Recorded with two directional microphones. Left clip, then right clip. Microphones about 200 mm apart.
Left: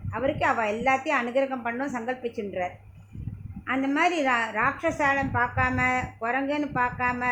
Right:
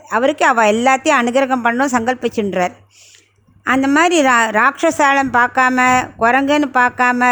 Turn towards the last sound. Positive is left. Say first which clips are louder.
# right 13 dB
turn(degrees=-55)  # may be behind; listen again after turning